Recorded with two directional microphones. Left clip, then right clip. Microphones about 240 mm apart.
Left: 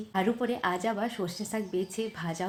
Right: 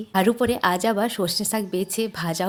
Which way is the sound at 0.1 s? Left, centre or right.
Right.